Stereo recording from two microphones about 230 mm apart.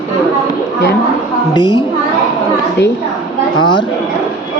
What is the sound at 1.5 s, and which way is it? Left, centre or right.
Speech, centre.